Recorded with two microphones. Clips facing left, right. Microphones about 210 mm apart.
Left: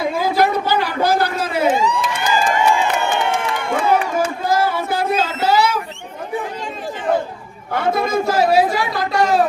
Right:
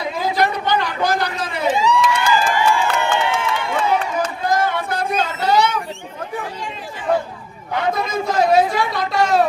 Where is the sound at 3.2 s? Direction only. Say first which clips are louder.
Left 1 dB; 50° left (ahead or behind).